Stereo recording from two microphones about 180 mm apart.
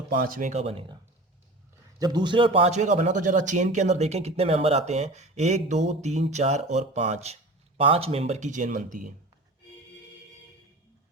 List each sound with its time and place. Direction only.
0.1 s speech: 50° right (ahead or behind); by 0.9 s 30° right (ahead or behind)
2.0 s a man's voice: 25° right (ahead or behind); by 8.8 s 45° right (ahead or behind)